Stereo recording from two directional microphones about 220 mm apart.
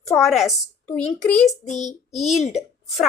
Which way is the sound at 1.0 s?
30° left (ahead or behind).